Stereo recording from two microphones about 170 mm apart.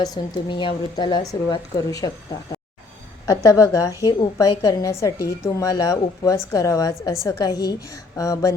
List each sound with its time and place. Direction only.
0.0 s a woman's voice: 25° left (ahead or behind)
3.2 s a woman's voice: 20° left (ahead or behind)